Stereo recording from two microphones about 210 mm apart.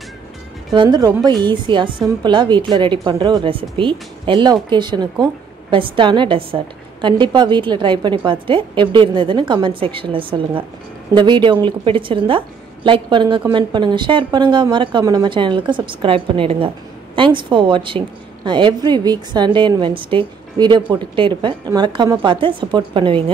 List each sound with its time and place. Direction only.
0.7 s a woman's voice: 20° right (ahead or behind)